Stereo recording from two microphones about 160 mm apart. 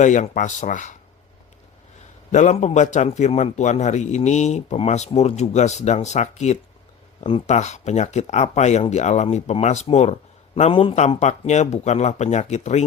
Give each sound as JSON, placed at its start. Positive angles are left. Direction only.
{"t": 0.0, "sound": "a man's voice", "side_deg": 50}
{"t": 2.3, "sound": "a man's voice", "side_deg": 50}